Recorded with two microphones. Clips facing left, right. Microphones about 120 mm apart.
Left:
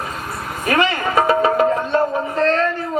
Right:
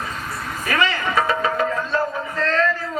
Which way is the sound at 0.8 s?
25° left (ahead or behind).